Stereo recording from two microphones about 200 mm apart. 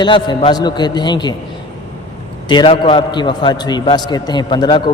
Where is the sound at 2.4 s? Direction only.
25° left (ahead or behind).